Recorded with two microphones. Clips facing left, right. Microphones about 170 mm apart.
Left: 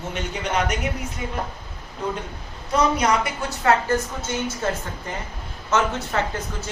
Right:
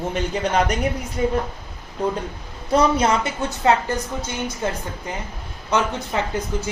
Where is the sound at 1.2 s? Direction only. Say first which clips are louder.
Right 10 dB; 40° right (ahead or behind).